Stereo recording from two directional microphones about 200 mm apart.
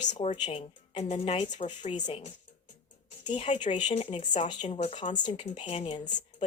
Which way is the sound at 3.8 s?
25° left (ahead or behind).